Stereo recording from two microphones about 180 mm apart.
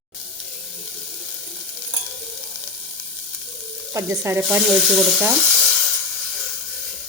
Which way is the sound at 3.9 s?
15° right (ahead or behind).